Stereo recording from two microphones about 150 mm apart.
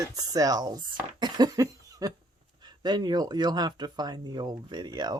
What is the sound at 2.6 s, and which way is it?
Speech, 30° right (ahead or behind).